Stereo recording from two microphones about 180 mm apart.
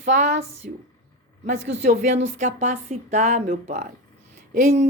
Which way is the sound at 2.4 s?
40° right (ahead or behind).